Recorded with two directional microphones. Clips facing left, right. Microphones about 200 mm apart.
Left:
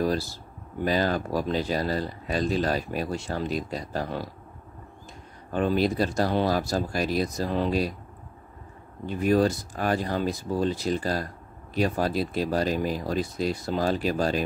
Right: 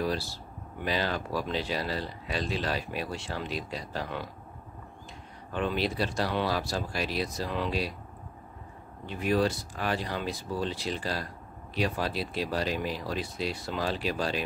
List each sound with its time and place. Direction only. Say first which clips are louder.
0.0 s speech: left 5 dB; 45° left (ahead or behind)
5.5 s speech: left 6 dB; 45° left (ahead or behind)
9.0 s speech: left 5 dB; 45° left (ahead or behind)